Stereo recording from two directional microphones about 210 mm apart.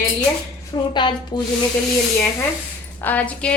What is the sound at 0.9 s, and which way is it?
Speech, 20° left (ahead or behind).